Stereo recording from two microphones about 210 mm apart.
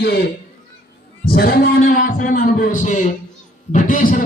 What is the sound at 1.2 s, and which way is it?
Speech, 45° left (ahead or behind).